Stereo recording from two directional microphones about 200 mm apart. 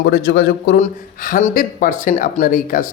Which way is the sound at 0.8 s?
40° left (ahead or behind).